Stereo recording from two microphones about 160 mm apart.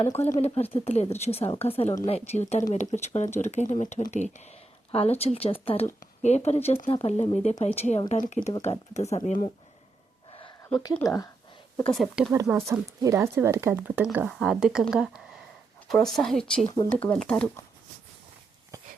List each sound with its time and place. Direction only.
0.0 s speech: 45° left (ahead or behind)
7.6 s speech: 45° left (ahead or behind)
11.9 s speech: centre (ahead or behind)
12.3 s speech: 15° right (ahead or behind)
14.3 s speech: centre (ahead or behind)